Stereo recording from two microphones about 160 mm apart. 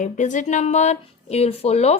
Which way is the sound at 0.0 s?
50° left (ahead or behind).